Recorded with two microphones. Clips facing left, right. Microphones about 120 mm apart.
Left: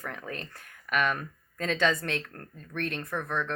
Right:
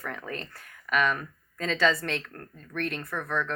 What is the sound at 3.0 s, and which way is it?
Speech, 25° left (ahead or behind).